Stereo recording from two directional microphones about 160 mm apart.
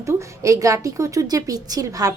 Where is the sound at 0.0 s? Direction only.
20° right (ahead or behind).